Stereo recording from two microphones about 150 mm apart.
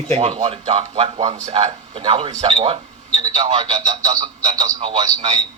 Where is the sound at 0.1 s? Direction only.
45° right (ahead or behind).